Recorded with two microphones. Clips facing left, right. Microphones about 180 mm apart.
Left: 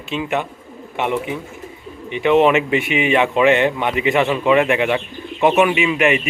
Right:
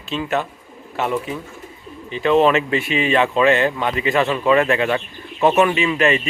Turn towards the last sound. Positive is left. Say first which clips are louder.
# left 1 dB
turn(degrees=15)  # may be behind; listen again after turning